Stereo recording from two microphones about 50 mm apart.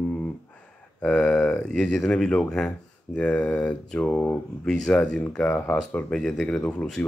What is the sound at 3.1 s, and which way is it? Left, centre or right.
Speech, left.